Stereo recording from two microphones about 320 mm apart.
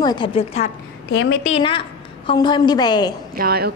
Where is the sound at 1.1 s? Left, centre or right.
Left.